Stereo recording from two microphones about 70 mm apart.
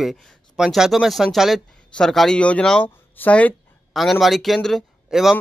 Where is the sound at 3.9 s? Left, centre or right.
Centre.